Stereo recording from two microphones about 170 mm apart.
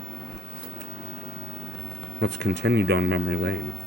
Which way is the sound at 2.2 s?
90° right.